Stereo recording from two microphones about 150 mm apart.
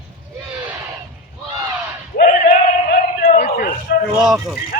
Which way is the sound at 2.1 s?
70° left (ahead or behind).